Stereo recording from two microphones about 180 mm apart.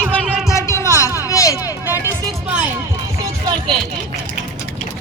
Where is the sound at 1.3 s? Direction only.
15° left (ahead or behind).